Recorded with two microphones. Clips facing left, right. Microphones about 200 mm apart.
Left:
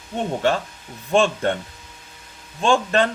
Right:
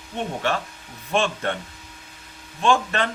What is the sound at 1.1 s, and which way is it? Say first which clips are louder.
Speech: left 5 dB; 30° left (ahead or behind).